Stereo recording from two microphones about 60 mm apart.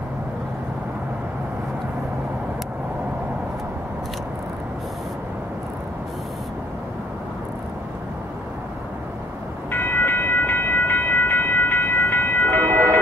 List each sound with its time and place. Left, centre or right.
9.7 s train: left